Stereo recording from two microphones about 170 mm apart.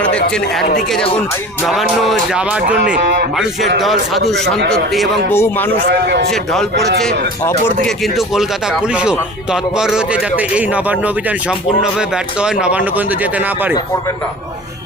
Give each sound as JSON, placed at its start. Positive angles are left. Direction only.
{"t": 0.3, "sound": "speech", "side_deg": 5}
{"t": 2.8, "sound": "speech", "side_deg": -55}
{"t": 3.3, "sound": "speech", "side_deg": 0}
{"t": 5.3, "sound": "speech", "side_deg": 10}
{"t": 5.8, "sound": "a man's voice", "side_deg": -85}
{"t": 6.3, "sound": "speech", "side_deg": 0}
{"t": 7.9, "sound": "a man's voice", "side_deg": 0}